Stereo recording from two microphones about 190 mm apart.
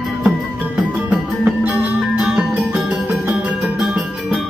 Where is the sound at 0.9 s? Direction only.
10° right (ahead or behind).